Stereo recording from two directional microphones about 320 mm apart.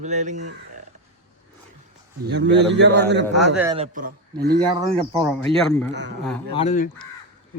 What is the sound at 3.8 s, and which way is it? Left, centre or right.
Speech, right.